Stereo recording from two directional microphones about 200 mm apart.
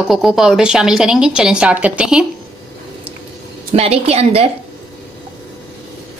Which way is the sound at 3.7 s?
30° right (ahead or behind).